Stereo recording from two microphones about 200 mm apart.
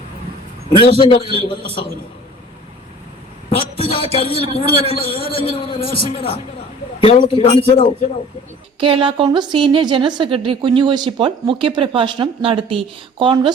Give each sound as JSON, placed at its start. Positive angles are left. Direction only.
{"t": 0.8, "sound": "a man's voice", "side_deg": 25}
{"t": 3.5, "sound": "a man's voice", "side_deg": 30}
{"t": 8.8, "sound": "a woman's voice", "side_deg": -25}